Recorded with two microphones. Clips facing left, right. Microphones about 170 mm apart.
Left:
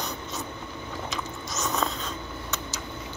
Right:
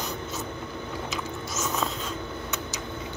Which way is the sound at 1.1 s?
5° right (ahead or behind).